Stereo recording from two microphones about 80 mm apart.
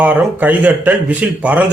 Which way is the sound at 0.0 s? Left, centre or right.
Right.